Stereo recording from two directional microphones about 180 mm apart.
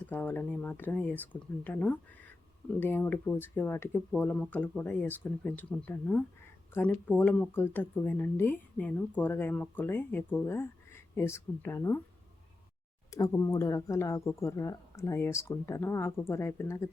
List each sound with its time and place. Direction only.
0.1 s speech: 10° left (ahead or behind)
13.1 s speech: 20° left (ahead or behind)